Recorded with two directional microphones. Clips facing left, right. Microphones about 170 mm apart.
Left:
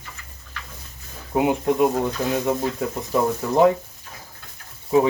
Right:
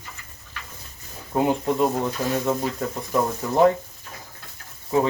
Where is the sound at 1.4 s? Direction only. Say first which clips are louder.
Left 2 dB; 15° left (ahead or behind).